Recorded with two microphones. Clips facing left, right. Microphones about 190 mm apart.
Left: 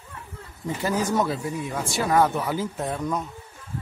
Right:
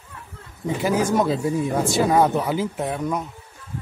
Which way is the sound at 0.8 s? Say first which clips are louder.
Right 4 dB; 15° right (ahead or behind).